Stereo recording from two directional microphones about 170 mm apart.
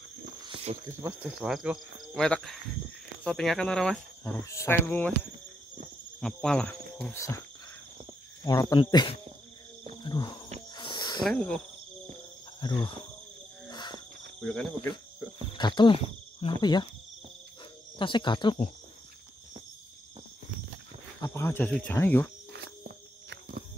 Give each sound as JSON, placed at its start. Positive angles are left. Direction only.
{"t": 0.5, "sound": "cricket", "side_deg": -35}
{"t": 1.2, "sound": "speech", "side_deg": -5}
{"t": 4.2, "sound": "speech", "side_deg": 15}
{"t": 7.2, "sound": "speech", "side_deg": 15}
{"t": 8.5, "sound": "speech", "side_deg": 20}
{"t": 10.7, "sound": "a sound", "side_deg": 25}
{"t": 11.2, "sound": "speech", "side_deg": 5}
{"t": 12.6, "sound": "speech", "side_deg": 25}
{"t": 13.7, "sound": "insect", "side_deg": 25}
{"t": 14.4, "sound": "speech", "side_deg": 5}
{"t": 15.5, "sound": "speech", "side_deg": 25}
{"t": 17.9, "sound": "speech", "side_deg": 30}
{"t": 21.2, "sound": "speech", "side_deg": 15}